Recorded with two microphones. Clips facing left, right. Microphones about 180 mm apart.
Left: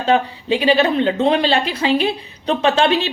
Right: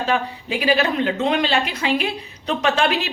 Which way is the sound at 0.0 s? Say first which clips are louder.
Left 5 dB; 30° left (ahead or behind).